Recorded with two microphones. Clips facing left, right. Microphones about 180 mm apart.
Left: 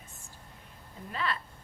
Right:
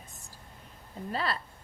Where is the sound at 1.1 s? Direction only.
35° right (ahead or behind).